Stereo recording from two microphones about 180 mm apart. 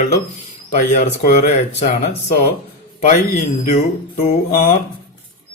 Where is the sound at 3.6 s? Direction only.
45° left (ahead or behind).